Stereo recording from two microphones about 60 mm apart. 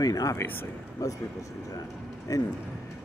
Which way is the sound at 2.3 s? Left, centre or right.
Left.